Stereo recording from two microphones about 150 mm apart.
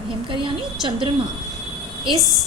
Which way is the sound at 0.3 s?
35° right (ahead or behind).